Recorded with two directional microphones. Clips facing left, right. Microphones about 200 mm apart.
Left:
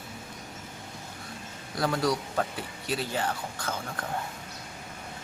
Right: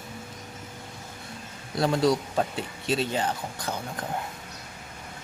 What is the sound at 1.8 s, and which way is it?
A man's voice, 25° right (ahead or behind).